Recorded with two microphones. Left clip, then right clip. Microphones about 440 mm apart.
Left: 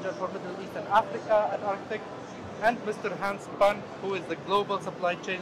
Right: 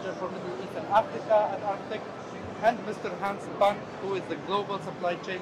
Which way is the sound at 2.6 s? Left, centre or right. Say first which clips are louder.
Even; left.